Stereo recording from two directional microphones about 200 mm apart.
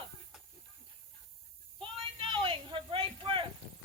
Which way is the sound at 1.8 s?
25° right (ahead or behind).